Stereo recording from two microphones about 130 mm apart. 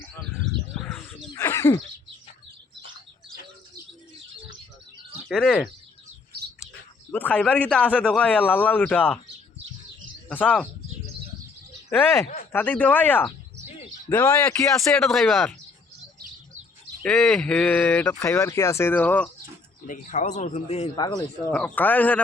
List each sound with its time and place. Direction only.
0.7 s bird: centre (ahead or behind)
1.4 s a sound: 20° left (ahead or behind)
5.3 s speech: centre (ahead or behind)
7.1 s speech: 10° left (ahead or behind)
10.2 s speech: 10° left (ahead or behind)
12.5 s speech: 15° left (ahead or behind)
17.0 s speech: 10° left (ahead or behind)
19.9 s speech: 70° left (ahead or behind)
20.9 s speech: 30° left (ahead or behind)
21.5 s speech: 10° left (ahead or behind)